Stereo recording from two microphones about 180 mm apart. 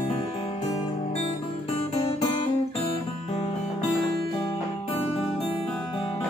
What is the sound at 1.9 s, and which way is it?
Music, 30° left (ahead or behind).